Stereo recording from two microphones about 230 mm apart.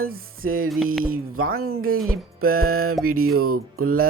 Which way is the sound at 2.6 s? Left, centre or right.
Right.